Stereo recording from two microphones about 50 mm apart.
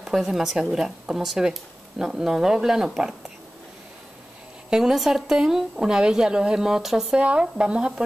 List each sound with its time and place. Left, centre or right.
0.0 s a woman's voice: centre
4.6 s a woman's voice: centre
7.2 s speech: right